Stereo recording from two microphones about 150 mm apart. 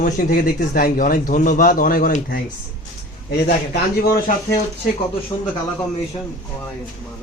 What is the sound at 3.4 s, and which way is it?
Speech, 90° left.